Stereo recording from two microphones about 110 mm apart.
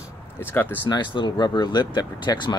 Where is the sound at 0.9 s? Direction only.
45° left (ahead or behind).